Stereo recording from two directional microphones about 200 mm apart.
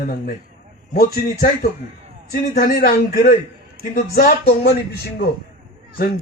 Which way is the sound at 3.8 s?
45° right (ahead or behind).